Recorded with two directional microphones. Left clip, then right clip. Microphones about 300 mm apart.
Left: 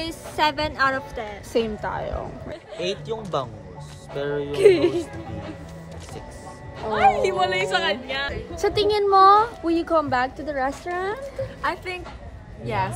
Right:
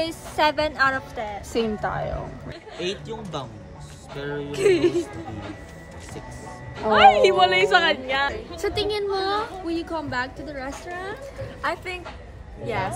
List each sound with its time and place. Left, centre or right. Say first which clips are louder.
0.0 s a woman's voice: right 1 dB; centre; by 4.9 s left
6.9 s speech: right 5 dB; right
8.5 s speech: left 6 dB; centre
11.6 s a woman's voice: right 1 dB; centre